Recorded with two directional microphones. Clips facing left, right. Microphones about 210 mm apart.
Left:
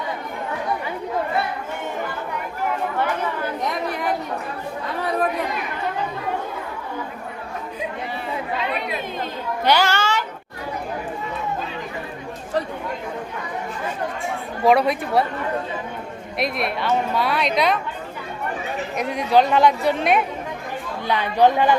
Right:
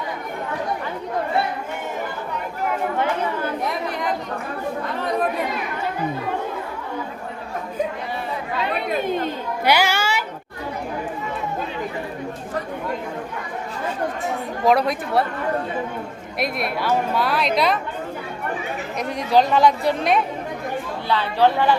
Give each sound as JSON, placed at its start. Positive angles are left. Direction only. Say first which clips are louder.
{"t": 9.6, "sound": "a child's voice", "louder": "even", "side_deg": -10}
{"t": 14.6, "sound": "a woman's voice", "louder": "left 2 dB", "side_deg": 0}
{"t": 16.4, "sound": "a woman's voice", "louder": "even", "side_deg": 0}
{"t": 18.9, "sound": "a woman's voice", "louder": "left 1 dB", "side_deg": 5}
{"t": 21.1, "sound": "speech", "louder": "left 1 dB", "side_deg": 15}